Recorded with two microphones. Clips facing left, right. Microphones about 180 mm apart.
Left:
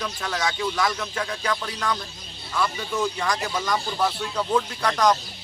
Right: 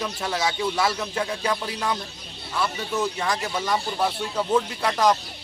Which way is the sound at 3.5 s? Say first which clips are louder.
Right 1 dB; 25° right (ahead or behind).